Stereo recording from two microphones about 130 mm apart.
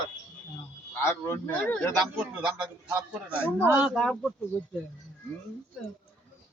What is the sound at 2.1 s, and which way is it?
A man's voice, 10° right (ahead or behind).